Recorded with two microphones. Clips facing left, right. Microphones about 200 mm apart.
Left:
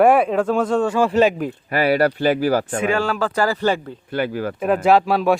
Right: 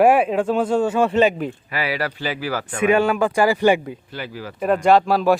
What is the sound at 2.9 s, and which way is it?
Speech, 20° right (ahead or behind).